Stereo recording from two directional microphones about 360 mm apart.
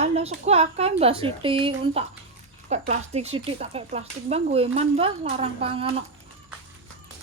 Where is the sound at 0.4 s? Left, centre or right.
Centre.